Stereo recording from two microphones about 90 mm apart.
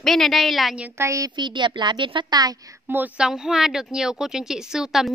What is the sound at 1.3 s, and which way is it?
A woman's voice, 60° right (ahead or behind).